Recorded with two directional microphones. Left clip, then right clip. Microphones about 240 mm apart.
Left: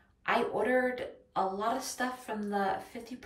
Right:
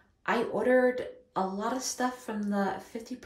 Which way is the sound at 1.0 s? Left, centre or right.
Centre.